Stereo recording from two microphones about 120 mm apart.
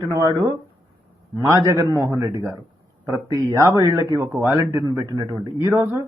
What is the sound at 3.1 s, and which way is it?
A man's voice, 25° right (ahead or behind).